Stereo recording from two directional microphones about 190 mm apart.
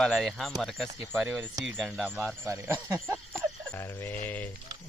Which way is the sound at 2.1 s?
10° right (ahead or behind).